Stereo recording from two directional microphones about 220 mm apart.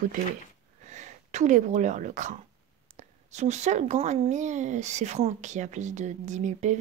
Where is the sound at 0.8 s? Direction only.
30° right (ahead or behind).